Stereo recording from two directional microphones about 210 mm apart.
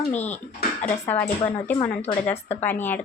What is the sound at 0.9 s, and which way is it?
Speech, 10° left (ahead or behind).